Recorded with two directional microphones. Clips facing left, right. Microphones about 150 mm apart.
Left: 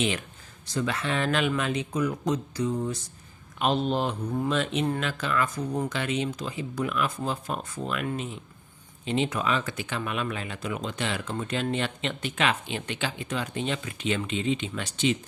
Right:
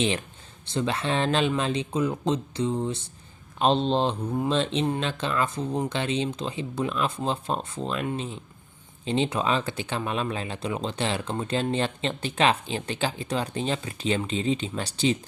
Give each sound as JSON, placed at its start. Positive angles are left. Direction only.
{"t": 0.6, "sound": "speech", "side_deg": -25}